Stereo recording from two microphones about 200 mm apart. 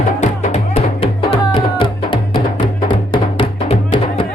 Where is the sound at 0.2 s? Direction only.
30° left (ahead or behind).